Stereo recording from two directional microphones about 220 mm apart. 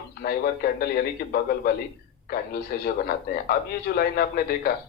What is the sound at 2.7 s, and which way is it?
A man's voice, 40° left (ahead or behind).